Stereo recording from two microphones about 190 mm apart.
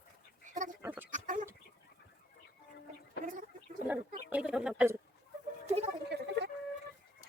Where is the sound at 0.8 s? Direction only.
10° right (ahead or behind).